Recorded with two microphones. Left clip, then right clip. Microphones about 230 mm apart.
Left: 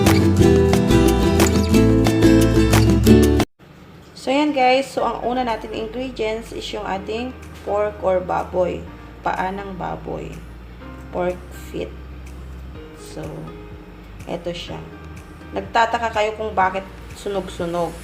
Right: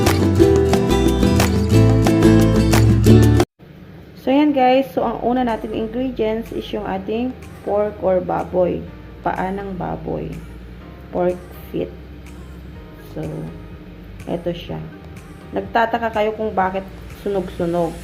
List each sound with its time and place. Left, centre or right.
0.0 s music: centre
4.2 s a woman's voice: centre
11.7 s a woman's voice: centre
13.2 s a woman's voice: centre